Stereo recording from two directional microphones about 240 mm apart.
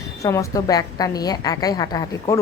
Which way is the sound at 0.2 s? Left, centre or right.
Centre.